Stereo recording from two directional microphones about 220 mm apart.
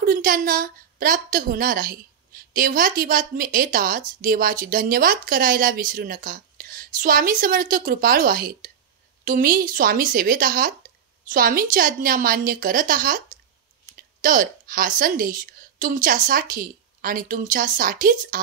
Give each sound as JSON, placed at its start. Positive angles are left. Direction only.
{"t": 0.0, "sound": "a woman's voice", "side_deg": -40}
{"t": 14.2, "sound": "a woman's voice", "side_deg": -40}